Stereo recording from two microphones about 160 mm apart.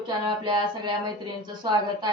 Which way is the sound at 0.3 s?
30° right (ahead or behind).